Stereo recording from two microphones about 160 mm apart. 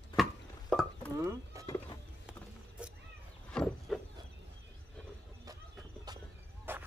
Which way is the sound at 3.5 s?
5° left (ahead or behind).